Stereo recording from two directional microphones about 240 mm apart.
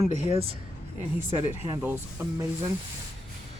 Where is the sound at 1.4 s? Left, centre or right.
Centre.